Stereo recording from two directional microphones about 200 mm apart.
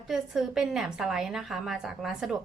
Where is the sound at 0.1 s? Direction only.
Centre (ahead or behind).